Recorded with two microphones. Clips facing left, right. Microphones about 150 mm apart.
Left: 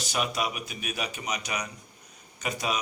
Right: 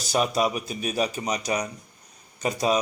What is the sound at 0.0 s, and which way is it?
Speech, 40° right (ahead or behind).